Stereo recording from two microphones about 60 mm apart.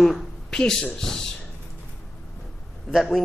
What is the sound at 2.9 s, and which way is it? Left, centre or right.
Speech, centre.